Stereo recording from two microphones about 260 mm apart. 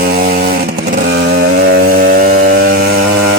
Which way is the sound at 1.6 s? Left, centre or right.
Right.